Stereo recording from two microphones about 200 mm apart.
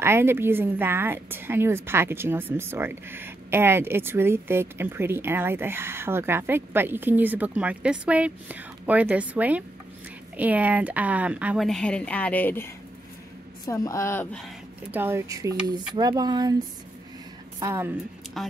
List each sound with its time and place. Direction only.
0.0 s a woman's voice: 10° right (ahead or behind); by 14.4 s 10° left (ahead or behind)
14.9 s speech: 10° right (ahead or behind)
17.6 s a woman's voice: 10° right (ahead or behind)
18.4 s speech: centre (ahead or behind)